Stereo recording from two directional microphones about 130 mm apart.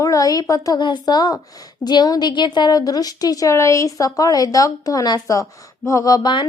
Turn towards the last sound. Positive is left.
turn(degrees=35)  # may be behind; listen again after turning